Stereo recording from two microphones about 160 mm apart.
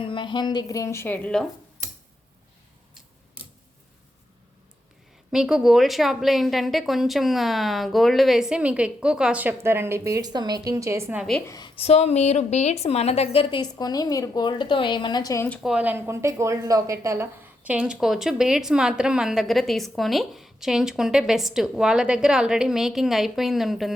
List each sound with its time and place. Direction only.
0.0 s a woman's voice: 30° left (ahead or behind); by 1.5 s 5° left (ahead or behind)
5.3 s a woman's voice: 5° right (ahead or behind)
11.2 s a woman's voice: 5° left (ahead or behind)
11.4 s a woman's voice: 25° left (ahead or behind)
11.8 s a woman's voice: 40° left (ahead or behind); by 15.4 s 20° left (ahead or behind)
15.4 s speech: 5° left (ahead or behind)
15.7 s a woman's voice: 10° right (ahead or behind)